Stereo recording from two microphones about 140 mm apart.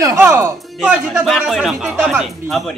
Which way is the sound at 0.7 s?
5° right (ahead or behind).